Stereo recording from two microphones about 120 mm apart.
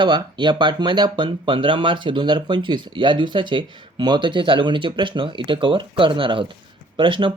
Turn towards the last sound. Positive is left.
turn(degrees=-45)  # may be behind; listen again after turning